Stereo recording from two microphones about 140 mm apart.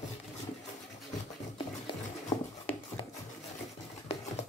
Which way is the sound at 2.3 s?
25° left (ahead or behind).